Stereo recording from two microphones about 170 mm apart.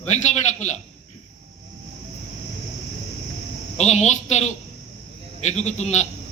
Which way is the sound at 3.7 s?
40° left (ahead or behind).